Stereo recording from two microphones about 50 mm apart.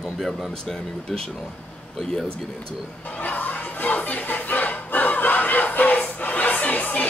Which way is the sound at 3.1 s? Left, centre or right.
Left.